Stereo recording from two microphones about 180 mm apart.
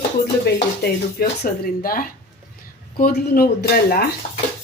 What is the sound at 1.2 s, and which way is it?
Speech, 55° left (ahead or behind).